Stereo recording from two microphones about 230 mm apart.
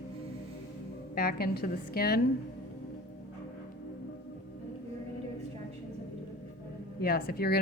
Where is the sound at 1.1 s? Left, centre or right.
Left.